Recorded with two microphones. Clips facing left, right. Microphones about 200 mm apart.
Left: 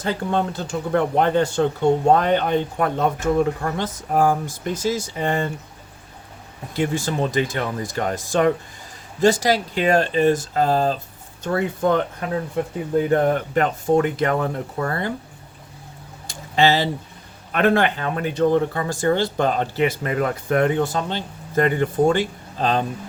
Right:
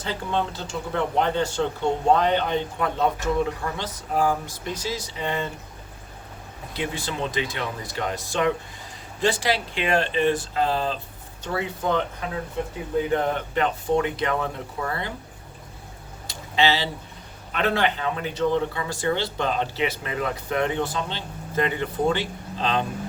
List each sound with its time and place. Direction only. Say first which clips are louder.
0.0 s speech: left 4 dB; 50° left (ahead or behind)
6.7 s speech: left 7 dB; 45° left (ahead or behind)
16.2 s a sound: left 4 dB; 45° left (ahead or behind)
17.5 s speech: left 5 dB; 50° left (ahead or behind)